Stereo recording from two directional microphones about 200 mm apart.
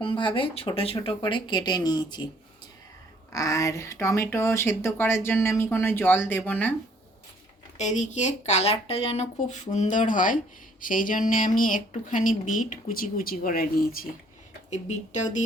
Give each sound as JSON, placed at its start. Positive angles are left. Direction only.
{"t": 0.0, "sound": "speech", "side_deg": 25}
{"t": 3.3, "sound": "speech", "side_deg": 15}
{"t": 7.8, "sound": "speech", "side_deg": 35}
{"t": 14.7, "sound": "speech", "side_deg": 35}